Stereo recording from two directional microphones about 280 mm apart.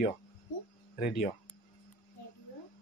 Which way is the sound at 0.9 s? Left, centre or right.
Left.